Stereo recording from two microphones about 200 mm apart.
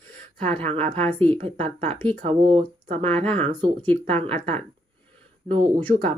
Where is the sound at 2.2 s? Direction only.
30° right (ahead or behind).